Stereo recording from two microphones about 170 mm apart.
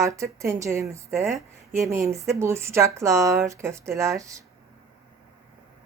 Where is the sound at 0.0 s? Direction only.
20° right (ahead or behind).